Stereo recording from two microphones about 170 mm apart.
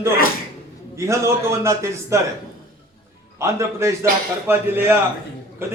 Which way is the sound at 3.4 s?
15° right (ahead or behind).